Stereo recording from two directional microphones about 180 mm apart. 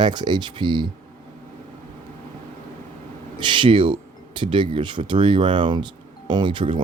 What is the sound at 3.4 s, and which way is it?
Speech, 25° right (ahead or behind).